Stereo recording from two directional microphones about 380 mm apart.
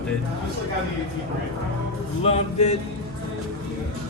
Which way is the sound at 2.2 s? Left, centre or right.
Centre.